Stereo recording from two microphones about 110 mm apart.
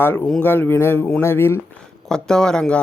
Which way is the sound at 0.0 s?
20° left (ahead or behind).